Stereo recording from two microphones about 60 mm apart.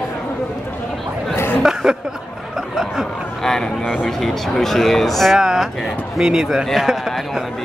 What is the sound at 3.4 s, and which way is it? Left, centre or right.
Speech, centre.